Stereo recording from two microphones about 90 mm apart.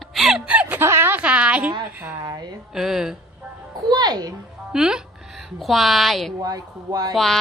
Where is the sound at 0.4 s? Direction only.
15° right (ahead or behind).